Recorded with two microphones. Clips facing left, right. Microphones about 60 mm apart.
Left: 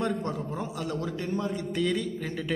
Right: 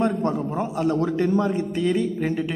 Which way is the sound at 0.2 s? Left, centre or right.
Right.